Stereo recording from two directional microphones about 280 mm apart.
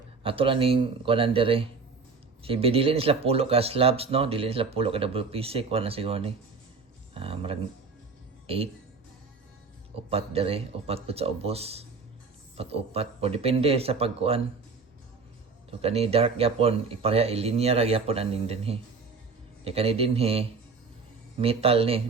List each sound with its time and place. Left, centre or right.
0.2 s speech: centre
9.9 s speech: right
15.7 s speech: right